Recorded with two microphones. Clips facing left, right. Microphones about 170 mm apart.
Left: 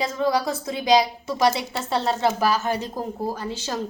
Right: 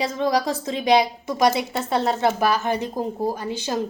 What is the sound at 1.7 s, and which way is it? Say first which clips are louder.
A woman's voice: right 2 dB; 20° right (ahead or behind).